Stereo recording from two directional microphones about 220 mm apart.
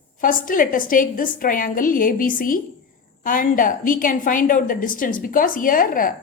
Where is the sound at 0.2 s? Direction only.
40° left (ahead or behind).